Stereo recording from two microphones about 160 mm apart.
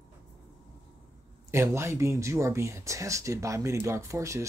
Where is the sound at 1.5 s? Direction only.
15° right (ahead or behind).